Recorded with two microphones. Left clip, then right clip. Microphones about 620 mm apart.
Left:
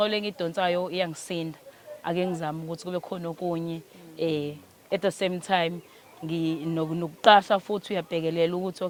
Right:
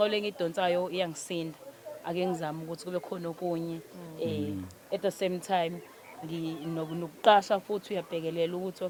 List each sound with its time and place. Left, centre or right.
0.0 s speech: centre